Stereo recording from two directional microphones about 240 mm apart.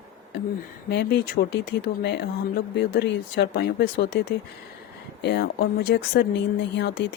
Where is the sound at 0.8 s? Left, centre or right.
Left.